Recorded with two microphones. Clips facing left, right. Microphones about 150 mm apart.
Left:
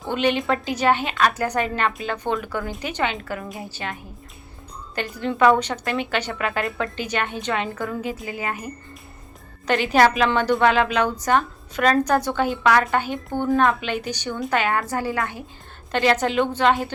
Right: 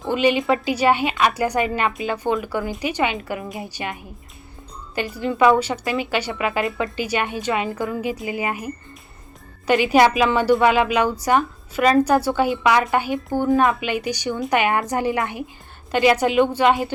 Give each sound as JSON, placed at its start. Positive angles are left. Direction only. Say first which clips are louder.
{"t": 0.0, "sound": "speech", "louder": "right 3 dB", "side_deg": -5}
{"t": 4.9, "sound": "speech", "louder": "right 2 dB", "side_deg": -5}